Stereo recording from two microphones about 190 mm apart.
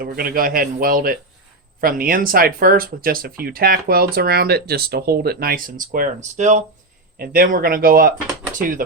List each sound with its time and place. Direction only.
0.0 s speech: 50° right (ahead or behind)
7.2 s speech: 50° right (ahead or behind)